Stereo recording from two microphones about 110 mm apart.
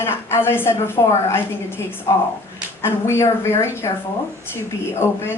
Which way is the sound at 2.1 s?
35° left (ahead or behind).